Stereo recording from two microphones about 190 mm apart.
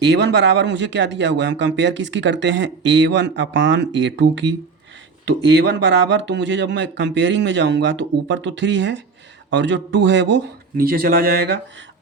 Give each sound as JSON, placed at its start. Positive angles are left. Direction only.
{"t": 0.0, "sound": "speech", "side_deg": -65}
{"t": 10.8, "sound": "speech", "side_deg": -55}